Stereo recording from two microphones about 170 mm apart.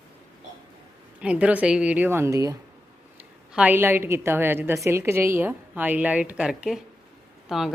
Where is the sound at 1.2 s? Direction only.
5° right (ahead or behind).